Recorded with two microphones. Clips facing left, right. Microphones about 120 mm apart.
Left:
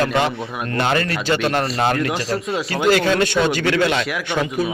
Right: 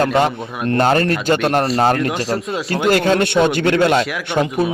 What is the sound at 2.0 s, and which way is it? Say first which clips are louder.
Speech: right 2 dB; centre (ahead or behind).